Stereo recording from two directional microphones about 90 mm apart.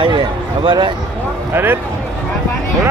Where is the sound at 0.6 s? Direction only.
70° right (ahead or behind).